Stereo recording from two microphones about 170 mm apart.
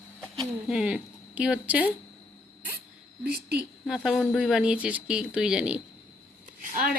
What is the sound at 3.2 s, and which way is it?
Speech, 65° right (ahead or behind).